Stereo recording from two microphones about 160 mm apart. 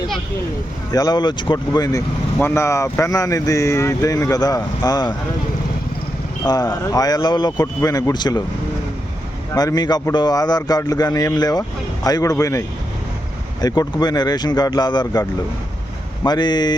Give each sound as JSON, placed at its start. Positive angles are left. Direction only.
{"t": 0.9, "sound": "speech", "side_deg": 25}
{"t": 6.4, "sound": "speech", "side_deg": 25}
{"t": 9.6, "sound": "speech", "side_deg": 25}
{"t": 16.2, "sound": "speech", "side_deg": 25}